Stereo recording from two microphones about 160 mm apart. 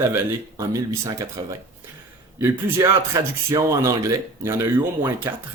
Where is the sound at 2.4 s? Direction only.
15° right (ahead or behind).